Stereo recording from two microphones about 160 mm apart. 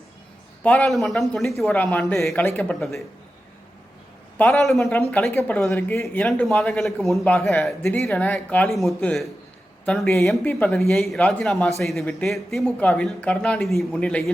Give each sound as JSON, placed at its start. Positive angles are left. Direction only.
{"t": 0.6, "sound": "speech", "side_deg": 10}
{"t": 2.3, "sound": "speech", "side_deg": 15}
{"t": 4.4, "sound": "speech", "side_deg": 0}
{"t": 5.1, "sound": "speech", "side_deg": 15}
{"t": 5.5, "sound": "speech", "side_deg": 0}
{"t": 5.9, "sound": "speech", "side_deg": 15}
{"t": 6.2, "sound": "speech", "side_deg": 5}